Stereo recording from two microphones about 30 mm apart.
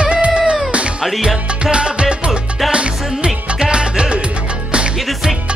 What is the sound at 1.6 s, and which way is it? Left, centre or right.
Music, right.